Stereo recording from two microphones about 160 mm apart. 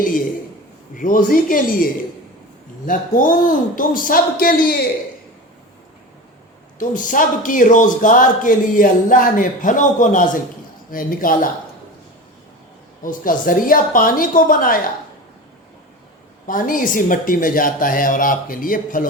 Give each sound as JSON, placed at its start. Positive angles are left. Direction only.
{"t": 0.9, "sound": "a man's voice", "side_deg": 60}
{"t": 6.7, "sound": "a man's voice", "side_deg": 55}
{"t": 13.0, "sound": "a man's voice", "side_deg": 60}
{"t": 16.5, "sound": "a man's voice", "side_deg": 60}